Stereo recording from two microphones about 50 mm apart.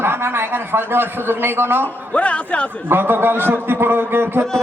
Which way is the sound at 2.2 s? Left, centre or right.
Left.